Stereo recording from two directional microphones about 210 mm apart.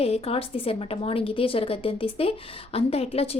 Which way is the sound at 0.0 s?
30° left (ahead or behind).